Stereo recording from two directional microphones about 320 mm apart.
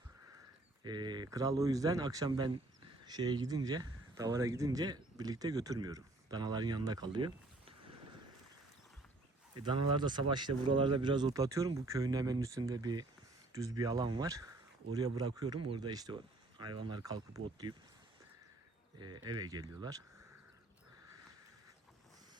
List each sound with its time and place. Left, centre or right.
0.9 s speech: centre
9.6 s speech: centre
17.7 s speech: right
18.9 s speech: centre